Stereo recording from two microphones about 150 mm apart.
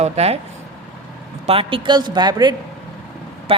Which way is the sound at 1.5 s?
35° right (ahead or behind).